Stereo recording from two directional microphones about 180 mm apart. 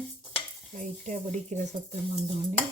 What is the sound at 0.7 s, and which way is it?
Cutlery, 45° right (ahead or behind).